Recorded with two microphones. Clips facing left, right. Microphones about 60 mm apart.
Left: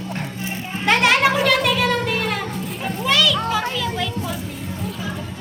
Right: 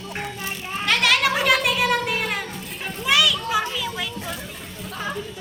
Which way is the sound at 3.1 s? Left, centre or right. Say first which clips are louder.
Left 1 dB; centre.